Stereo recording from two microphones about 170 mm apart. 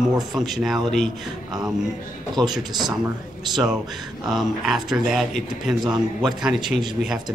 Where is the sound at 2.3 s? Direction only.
25° right (ahead or behind).